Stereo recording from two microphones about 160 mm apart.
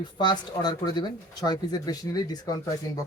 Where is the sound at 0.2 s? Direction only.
25° left (ahead or behind).